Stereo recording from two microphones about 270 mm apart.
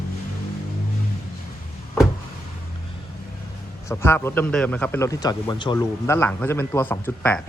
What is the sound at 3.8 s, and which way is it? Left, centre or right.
A man's voice, centre.